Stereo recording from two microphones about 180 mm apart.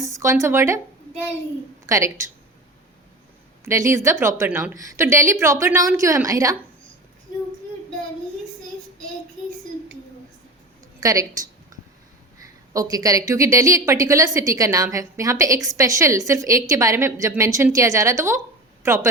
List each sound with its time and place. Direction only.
0.0 s a woman's voice: 15° right (ahead or behind)
1.9 s a woman's voice: 15° right (ahead or behind)
3.6 s a woman's voice: 15° right (ahead or behind)
11.0 s a sound: 20° right (ahead or behind)
12.7 s a woman's voice: 20° right (ahead or behind)